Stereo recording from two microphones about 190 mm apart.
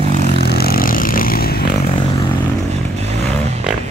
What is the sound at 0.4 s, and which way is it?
Vehicle, 55° left (ahead or behind).